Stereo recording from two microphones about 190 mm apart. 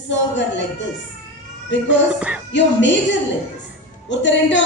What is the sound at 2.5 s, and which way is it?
Speech, 70° left (ahead or behind).